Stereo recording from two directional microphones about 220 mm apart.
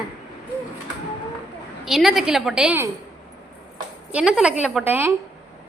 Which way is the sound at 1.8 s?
Centre (ahead or behind).